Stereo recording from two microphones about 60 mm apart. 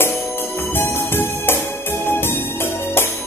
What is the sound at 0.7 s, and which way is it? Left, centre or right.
Music, left.